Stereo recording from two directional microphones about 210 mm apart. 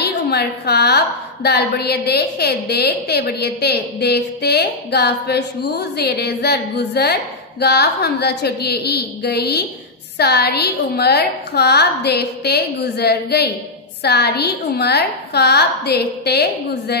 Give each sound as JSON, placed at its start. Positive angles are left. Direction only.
{"t": 0.0, "sound": "a woman's voice", "side_deg": 50}